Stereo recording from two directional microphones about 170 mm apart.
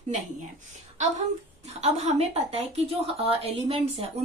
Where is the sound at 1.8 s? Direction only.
40° right (ahead or behind).